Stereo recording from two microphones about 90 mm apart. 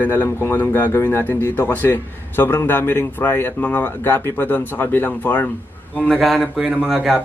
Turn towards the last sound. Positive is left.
turn(degrees=0)  # may be behind; listen again after turning